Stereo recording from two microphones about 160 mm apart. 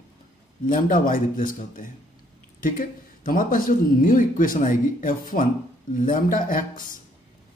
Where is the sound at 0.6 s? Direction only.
60° left (ahead or behind).